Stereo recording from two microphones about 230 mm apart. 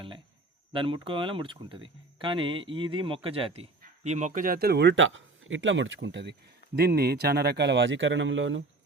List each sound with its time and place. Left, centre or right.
0.7 s speech: right